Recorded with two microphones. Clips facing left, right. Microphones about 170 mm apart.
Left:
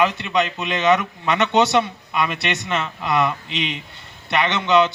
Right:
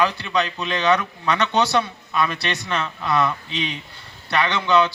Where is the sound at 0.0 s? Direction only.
20° left (ahead or behind).